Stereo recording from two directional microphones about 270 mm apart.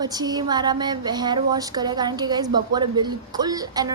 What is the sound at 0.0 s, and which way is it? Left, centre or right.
Speech, centre.